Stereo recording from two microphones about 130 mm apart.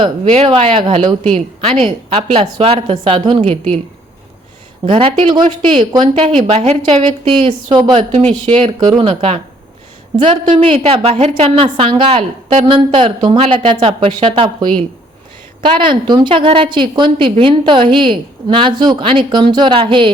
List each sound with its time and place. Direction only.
0.0 s a woman's voice: 45° right (ahead or behind)
4.9 s a woman's voice: 45° right (ahead or behind)
6.1 s a woman's voice: 50° right (ahead or behind)
7.9 s a woman's voice: 55° right (ahead or behind)
10.6 s a woman's voice: 45° right (ahead or behind)